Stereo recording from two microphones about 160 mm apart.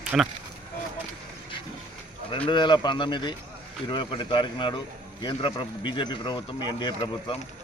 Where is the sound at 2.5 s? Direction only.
30° left (ahead or behind).